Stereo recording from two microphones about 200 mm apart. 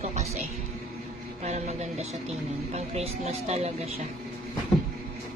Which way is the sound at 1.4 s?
35° right (ahead or behind).